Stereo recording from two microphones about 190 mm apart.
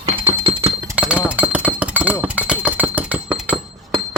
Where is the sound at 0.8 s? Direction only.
10° right (ahead or behind).